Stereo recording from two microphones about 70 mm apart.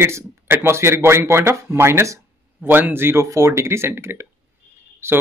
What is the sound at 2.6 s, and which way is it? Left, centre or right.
A man's voice, right.